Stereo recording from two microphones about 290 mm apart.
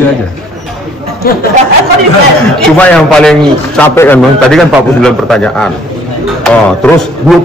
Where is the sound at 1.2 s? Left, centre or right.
Left.